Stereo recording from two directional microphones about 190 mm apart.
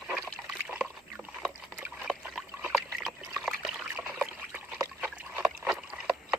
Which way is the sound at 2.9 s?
Centre (ahead or behind).